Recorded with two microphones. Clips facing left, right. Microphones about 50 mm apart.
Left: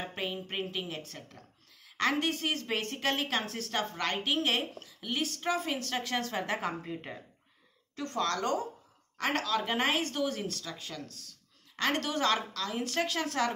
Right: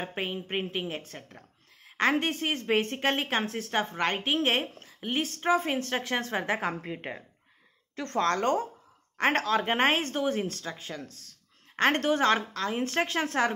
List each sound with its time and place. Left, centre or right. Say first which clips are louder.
0.0 s a woman's voice: right 3 dB; right